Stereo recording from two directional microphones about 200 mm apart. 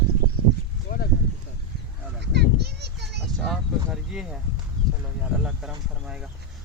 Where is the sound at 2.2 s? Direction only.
55° right (ahead or behind).